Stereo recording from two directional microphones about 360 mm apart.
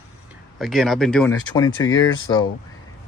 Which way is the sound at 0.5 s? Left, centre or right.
Centre.